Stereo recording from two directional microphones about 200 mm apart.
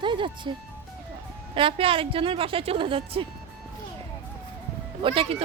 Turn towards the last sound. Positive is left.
turn(degrees=-25)  # may be behind; listen again after turning